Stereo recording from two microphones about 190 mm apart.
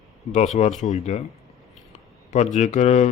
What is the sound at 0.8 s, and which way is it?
Speech, 40° left (ahead or behind).